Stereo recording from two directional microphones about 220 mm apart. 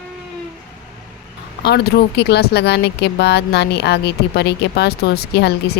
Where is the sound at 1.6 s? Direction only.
50° left (ahead or behind).